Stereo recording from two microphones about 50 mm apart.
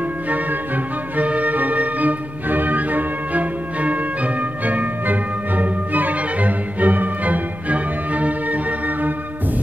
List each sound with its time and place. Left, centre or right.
1.1 s music: right